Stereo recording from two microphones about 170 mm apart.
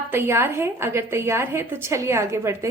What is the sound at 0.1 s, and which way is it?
A woman's voice, 15° right (ahead or behind).